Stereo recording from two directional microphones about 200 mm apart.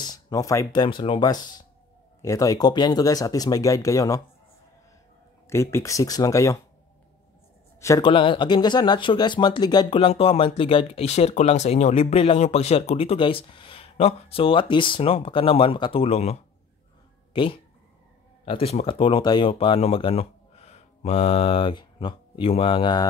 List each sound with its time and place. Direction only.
0.0 s speech: 20° left (ahead or behind)
5.5 s speech: 15° left (ahead or behind)
7.8 s speech: 20° left (ahead or behind)